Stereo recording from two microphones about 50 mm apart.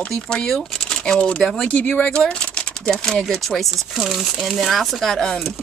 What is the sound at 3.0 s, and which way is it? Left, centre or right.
Speech, centre.